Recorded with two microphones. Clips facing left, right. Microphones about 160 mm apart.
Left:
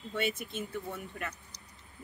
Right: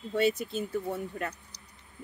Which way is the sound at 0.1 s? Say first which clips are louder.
Right 7 dB; 35° right (ahead or behind).